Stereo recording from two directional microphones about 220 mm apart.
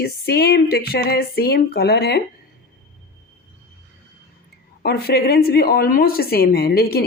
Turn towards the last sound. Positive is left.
turn(degrees=45)  # may be behind; listen again after turning